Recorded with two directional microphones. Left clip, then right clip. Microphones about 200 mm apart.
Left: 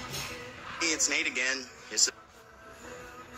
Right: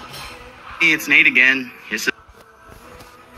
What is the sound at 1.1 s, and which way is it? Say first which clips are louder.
Speech: right 17 dB; 5° right (ahead or behind).